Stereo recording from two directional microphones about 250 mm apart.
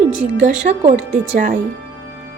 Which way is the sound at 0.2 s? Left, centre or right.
Right.